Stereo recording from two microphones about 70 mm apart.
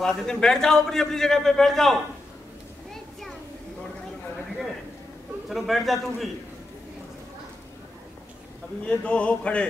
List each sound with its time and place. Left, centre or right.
0.0 s a man's voice: centre
2.9 s a sound: centre
5.5 s a man's voice: centre
8.8 s a man's voice: centre